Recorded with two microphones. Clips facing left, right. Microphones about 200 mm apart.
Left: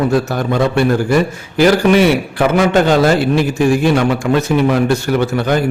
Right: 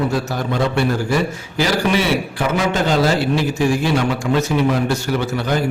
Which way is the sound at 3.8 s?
55° left (ahead or behind).